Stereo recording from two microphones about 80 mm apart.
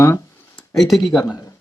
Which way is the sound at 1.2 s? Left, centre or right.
Left.